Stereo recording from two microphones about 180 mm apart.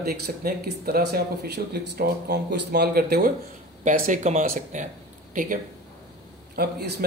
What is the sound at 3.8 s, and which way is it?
Speech, 45° right (ahead or behind).